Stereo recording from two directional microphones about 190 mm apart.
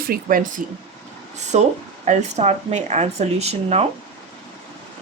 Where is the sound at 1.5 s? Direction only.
35° right (ahead or behind).